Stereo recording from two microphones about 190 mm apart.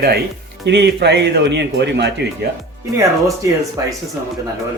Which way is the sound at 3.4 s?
15° right (ahead or behind).